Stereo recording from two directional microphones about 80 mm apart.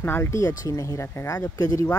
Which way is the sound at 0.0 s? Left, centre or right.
Left.